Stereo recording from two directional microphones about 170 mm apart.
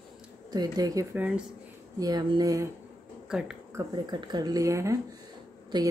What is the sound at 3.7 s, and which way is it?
Speech, 25° right (ahead or behind).